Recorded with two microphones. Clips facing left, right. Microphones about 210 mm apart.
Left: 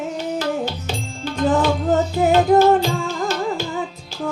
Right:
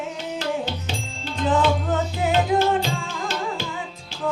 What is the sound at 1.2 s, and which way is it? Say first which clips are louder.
Music: left 3 dB; 45° left (ahead or behind).